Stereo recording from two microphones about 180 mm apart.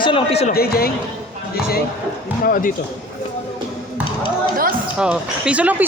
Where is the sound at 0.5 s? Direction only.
60° left (ahead or behind).